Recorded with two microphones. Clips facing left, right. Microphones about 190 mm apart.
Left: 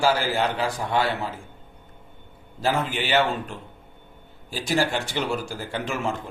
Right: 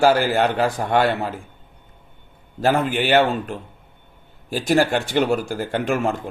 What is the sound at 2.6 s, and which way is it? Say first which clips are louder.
Speech: right 6 dB; 60° right (ahead or behind).